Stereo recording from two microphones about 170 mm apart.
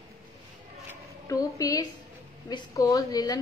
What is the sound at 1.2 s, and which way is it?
A woman's voice, 20° left (ahead or behind).